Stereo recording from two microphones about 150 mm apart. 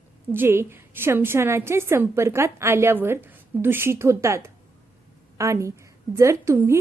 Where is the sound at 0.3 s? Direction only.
15° right (ahead or behind).